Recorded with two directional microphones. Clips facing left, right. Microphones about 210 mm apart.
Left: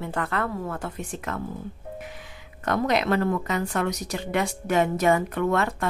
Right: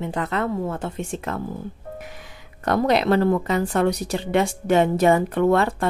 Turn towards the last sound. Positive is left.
turn(degrees=-30)  # may be behind; listen again after turning